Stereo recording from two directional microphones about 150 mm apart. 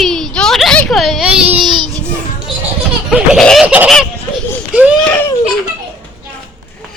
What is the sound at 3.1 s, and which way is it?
Laughter, centre (ahead or behind).